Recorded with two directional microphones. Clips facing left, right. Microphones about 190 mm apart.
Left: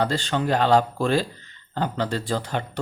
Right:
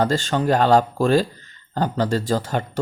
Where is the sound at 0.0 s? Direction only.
45° right (ahead or behind).